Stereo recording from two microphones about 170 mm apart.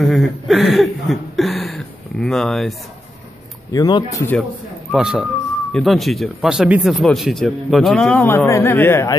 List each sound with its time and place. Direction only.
0.0 s a sound: centre (ahead or behind)
3.7 s speech: 20° left (ahead or behind)
4.9 s speech: 5° right (ahead or behind); by 9.1 s 15° left (ahead or behind)